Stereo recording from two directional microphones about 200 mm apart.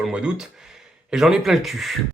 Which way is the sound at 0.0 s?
5° right (ahead or behind).